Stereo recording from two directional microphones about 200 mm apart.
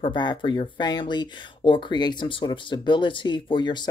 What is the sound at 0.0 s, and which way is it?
A woman's voice, 25° left (ahead or behind).